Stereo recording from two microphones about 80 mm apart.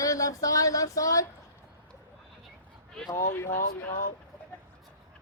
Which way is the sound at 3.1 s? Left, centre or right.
Left.